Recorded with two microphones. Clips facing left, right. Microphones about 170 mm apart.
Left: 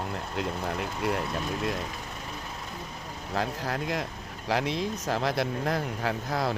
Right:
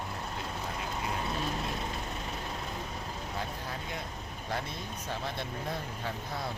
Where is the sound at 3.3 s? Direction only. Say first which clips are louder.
Left 11 dB; 90° left.